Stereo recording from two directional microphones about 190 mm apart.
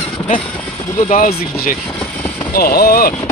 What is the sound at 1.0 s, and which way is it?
Speech, 45° left (ahead or behind).